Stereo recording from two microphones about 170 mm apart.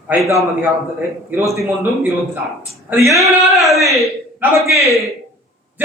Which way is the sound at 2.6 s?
15° right (ahead or behind).